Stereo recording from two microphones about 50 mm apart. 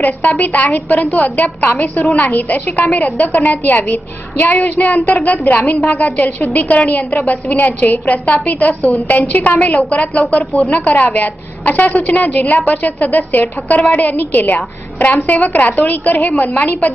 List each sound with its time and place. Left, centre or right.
0.4 s a woman's voice: left